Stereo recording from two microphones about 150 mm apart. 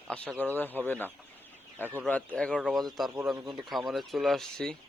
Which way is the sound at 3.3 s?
30° right (ahead or behind).